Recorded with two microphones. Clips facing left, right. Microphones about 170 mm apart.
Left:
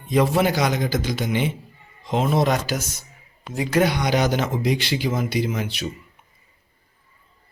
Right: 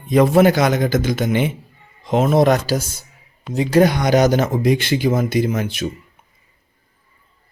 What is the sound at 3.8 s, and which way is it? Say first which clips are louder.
Speech: right 6 dB; 45° right (ahead or behind).